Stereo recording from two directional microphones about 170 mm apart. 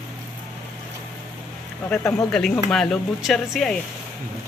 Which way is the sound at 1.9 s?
5° left (ahead or behind).